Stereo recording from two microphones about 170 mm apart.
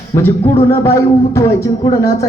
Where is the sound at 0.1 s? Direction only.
15° left (ahead or behind).